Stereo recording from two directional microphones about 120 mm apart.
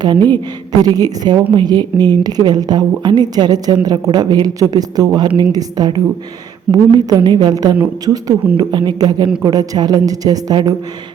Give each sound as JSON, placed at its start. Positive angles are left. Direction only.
{"t": 0.0, "sound": "a woman's voice", "side_deg": -40}